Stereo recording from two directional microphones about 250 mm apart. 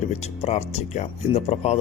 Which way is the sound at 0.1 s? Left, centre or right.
Left.